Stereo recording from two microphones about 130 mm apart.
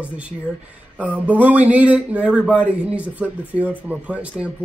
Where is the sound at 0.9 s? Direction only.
10° right (ahead or behind).